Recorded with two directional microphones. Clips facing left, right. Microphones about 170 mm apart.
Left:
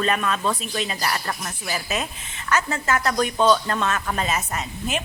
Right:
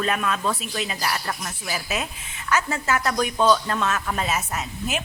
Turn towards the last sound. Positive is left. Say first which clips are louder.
# left 1 dB
turn(degrees=-5)  # may be behind; listen again after turning